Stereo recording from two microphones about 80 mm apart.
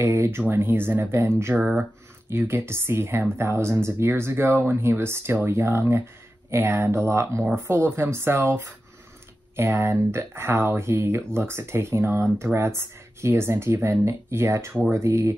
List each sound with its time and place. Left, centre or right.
0.0 s speech: right